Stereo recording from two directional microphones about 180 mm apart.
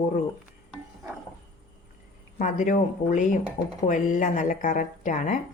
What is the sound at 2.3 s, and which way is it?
A woman's voice, 45° left (ahead or behind).